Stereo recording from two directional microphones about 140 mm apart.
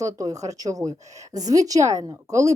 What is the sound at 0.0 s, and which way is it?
Speech, 25° right (ahead or behind).